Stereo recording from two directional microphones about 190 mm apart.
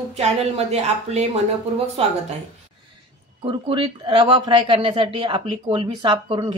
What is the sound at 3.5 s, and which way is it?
Speech, 25° right (ahead or behind).